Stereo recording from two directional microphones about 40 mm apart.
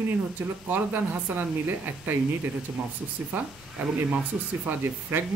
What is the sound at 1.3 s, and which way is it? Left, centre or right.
Speech, right.